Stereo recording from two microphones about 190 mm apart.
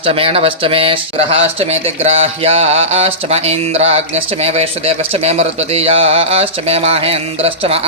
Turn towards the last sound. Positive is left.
turn(degrees=-30)  # may be behind; listen again after turning